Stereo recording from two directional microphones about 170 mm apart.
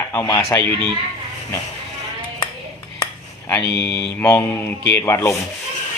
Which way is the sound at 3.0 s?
15° left (ahead or behind).